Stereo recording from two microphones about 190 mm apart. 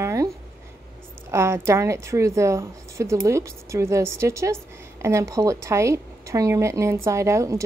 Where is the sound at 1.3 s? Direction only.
15° right (ahead or behind).